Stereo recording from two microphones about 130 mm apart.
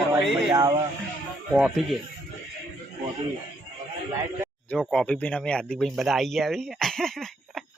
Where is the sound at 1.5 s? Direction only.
Centre (ahead or behind).